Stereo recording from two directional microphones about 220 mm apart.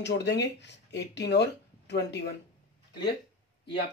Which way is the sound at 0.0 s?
50° left (ahead or behind).